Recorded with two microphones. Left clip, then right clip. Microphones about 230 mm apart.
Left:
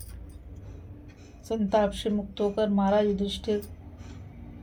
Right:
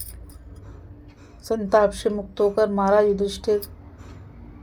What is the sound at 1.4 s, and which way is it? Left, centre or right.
A woman's voice, right.